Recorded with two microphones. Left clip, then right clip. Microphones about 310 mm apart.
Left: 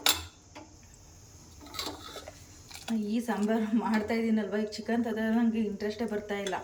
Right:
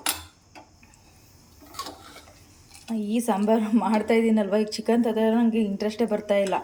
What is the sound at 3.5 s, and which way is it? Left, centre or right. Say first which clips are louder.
Speech: right 8 dB; centre.